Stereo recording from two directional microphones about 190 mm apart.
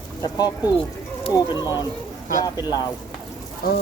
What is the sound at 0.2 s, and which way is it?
Speech, 20° left (ahead or behind).